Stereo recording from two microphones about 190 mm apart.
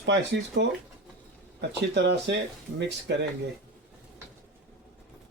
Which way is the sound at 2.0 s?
65° right (ahead or behind).